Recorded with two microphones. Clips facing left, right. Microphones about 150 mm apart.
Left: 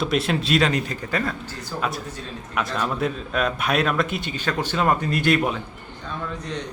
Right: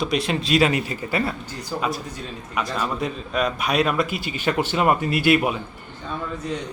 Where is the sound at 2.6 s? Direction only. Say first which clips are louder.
Left 1 dB; centre (ahead or behind).